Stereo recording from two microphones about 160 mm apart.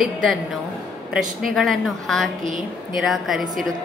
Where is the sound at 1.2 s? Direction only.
60° right (ahead or behind).